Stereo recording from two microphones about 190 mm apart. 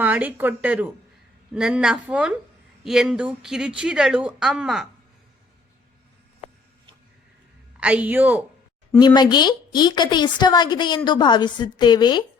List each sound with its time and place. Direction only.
0.0 s a woman's voice: 10° right (ahead or behind)
7.8 s speech: 5° right (ahead or behind)
9.0 s a woman's voice: 20° left (ahead or behind)